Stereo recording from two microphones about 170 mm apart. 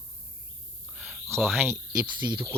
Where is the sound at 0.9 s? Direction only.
10° right (ahead or behind).